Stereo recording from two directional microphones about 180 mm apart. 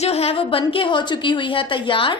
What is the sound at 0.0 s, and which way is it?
A woman's voice, 35° left (ahead or behind).